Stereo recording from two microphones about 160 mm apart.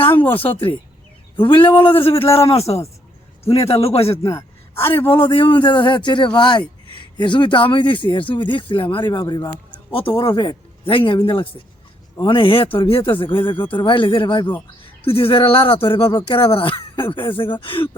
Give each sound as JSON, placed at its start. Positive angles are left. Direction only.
{"t": 1.4, "sound": "speech", "side_deg": 30}
{"t": 4.4, "sound": "a sound", "side_deg": 15}
{"t": 5.0, "sound": "a man's voice", "side_deg": 35}
{"t": 12.2, "sound": "speech", "side_deg": 30}